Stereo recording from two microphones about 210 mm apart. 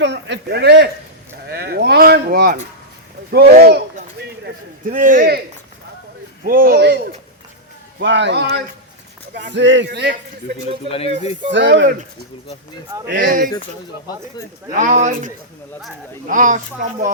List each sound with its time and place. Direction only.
0.0 s a man's voice: 55° right (ahead or behind)
1.5 s a sound: 50° right (ahead or behind)
3.3 s a man's voice: 50° right (ahead or behind)
4.9 s speech: 40° right (ahead or behind)
6.4 s a man's voice: 45° right (ahead or behind)
10.8 s speech: 25° left (ahead or behind)
11.5 s a man's voice: 60° right (ahead or behind)
13.1 s speech: 40° right (ahead or behind)
14.7 s speech: 40° right (ahead or behind)